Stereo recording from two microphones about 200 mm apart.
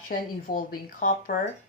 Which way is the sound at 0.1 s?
45° left (ahead or behind).